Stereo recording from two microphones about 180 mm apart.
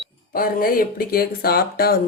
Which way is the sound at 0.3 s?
55° left (ahead or behind).